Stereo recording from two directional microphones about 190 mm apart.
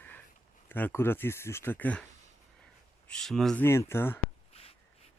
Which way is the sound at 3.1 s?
Centre (ahead or behind).